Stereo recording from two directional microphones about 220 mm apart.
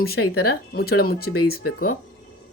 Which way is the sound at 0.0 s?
45° left (ahead or behind).